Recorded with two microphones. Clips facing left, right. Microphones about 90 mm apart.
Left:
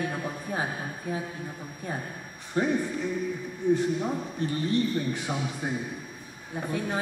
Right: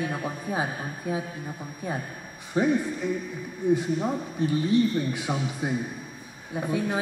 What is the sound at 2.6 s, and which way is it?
Speech, 10° right (ahead or behind).